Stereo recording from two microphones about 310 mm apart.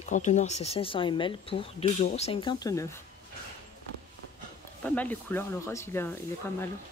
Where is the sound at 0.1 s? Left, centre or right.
Left.